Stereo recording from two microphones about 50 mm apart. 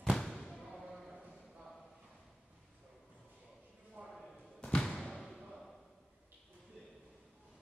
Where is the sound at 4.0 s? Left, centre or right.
Right.